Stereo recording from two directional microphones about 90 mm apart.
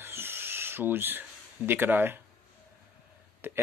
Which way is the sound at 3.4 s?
25° right (ahead or behind).